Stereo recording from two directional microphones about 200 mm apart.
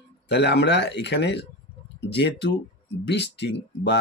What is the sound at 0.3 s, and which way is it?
Speech, 60° left (ahead or behind).